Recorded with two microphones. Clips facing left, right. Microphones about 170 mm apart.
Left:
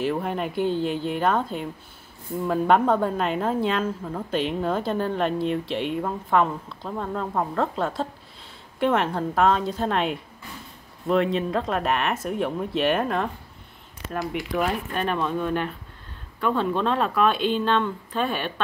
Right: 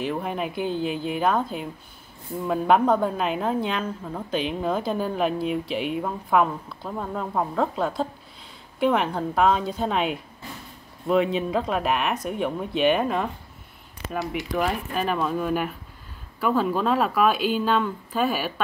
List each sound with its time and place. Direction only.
0.0 s speech: centre (ahead or behind)
14.3 s speech: centre (ahead or behind)